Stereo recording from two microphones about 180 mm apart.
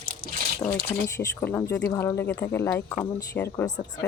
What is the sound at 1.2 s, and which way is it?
Speech, 15° left (ahead or behind).